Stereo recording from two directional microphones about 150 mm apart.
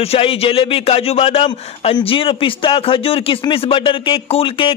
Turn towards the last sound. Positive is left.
turn(degrees=40)  # may be behind; listen again after turning